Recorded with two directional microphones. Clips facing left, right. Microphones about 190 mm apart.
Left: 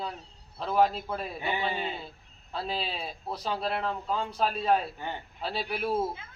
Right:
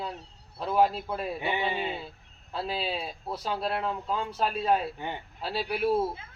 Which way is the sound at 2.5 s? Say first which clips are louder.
Right 2 dB; 5° right (ahead or behind).